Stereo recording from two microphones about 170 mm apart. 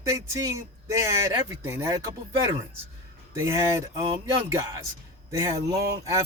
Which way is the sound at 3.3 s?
15° right (ahead or behind).